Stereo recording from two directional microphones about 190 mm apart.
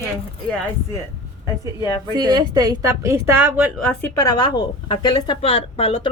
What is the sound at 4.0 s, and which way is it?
Speech, 20° left (ahead or behind).